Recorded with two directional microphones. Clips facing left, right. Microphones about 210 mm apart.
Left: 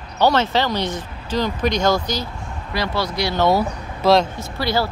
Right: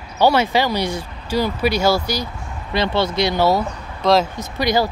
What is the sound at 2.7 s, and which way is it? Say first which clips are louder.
Speech: right 4 dB; 25° right (ahead or behind).